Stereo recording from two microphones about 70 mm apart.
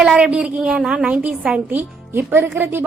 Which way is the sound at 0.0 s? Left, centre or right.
Centre.